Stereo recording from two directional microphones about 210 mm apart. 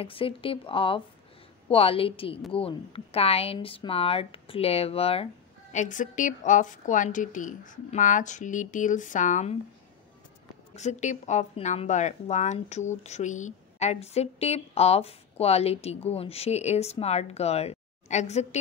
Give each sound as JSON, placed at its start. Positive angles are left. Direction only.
{"t": 0.0, "sound": "speech", "side_deg": 25}
{"t": 10.8, "sound": "speech", "side_deg": 35}